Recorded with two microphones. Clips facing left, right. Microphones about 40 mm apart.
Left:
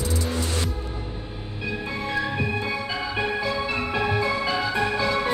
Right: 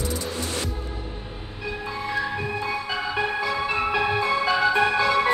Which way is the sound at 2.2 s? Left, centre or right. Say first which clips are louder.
Left 1 dB; centre.